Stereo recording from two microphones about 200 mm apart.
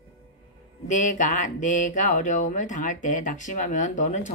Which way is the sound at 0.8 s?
40° left (ahead or behind).